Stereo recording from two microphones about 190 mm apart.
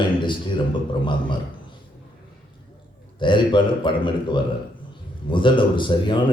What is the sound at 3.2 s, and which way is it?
A man's voice, 25° left (ahead or behind).